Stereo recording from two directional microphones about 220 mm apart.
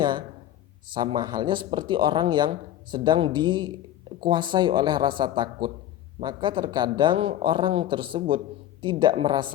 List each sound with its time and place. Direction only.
0.9 s speech: 20° right (ahead or behind)